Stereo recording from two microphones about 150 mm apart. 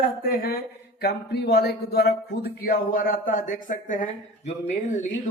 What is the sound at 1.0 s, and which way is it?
A man's voice, 90° left.